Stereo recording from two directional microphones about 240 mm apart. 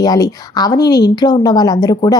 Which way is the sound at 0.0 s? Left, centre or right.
Centre.